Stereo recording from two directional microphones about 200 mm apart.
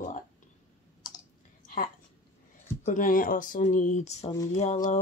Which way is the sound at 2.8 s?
40° left (ahead or behind).